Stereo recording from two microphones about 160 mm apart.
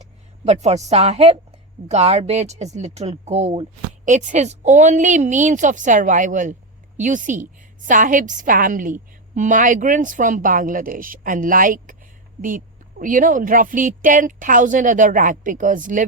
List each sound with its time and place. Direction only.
0.0 s a woman's voice: 45° right (ahead or behind)
3.8 s a woman's voice: 50° right (ahead or behind)